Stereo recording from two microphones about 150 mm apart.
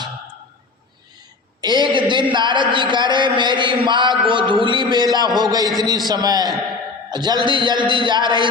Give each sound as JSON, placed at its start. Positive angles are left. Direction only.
{"t": 1.6, "sound": "a man's voice", "side_deg": -30}